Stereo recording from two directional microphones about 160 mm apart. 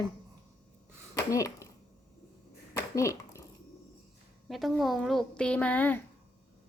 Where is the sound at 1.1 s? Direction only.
20° left (ahead or behind).